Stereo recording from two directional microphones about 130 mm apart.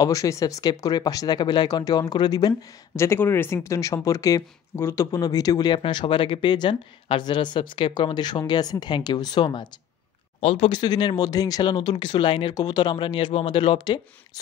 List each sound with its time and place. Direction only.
0.0 s speech: 25° left (ahead or behind)
3.0 s speech: 20° left (ahead or behind); by 9.7 s 35° left (ahead or behind)
10.4 s speech: 50° left (ahead or behind)
10.7 s speech: 35° left (ahead or behind)